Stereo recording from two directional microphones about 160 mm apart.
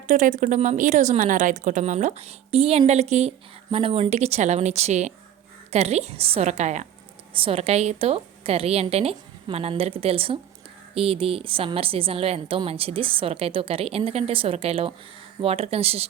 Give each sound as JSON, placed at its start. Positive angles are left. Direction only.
{"t": 0.1, "sound": "speech", "side_deg": -50}
{"t": 7.3, "sound": "a woman's voice", "side_deg": -35}